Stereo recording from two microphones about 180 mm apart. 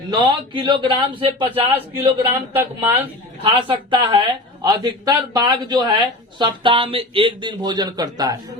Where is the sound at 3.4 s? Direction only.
30° right (ahead or behind).